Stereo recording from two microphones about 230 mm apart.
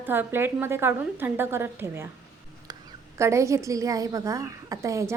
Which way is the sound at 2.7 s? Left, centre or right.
Centre.